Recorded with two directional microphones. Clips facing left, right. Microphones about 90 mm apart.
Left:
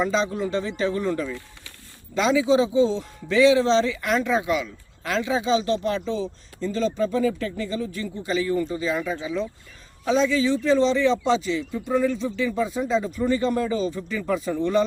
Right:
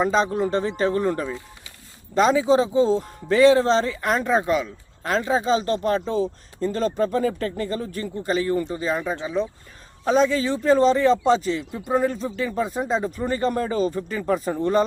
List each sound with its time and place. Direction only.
0.0 s speech: 45° right (ahead or behind)